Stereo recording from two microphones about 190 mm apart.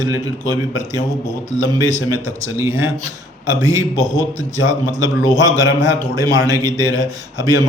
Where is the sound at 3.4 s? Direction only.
20° right (ahead or behind).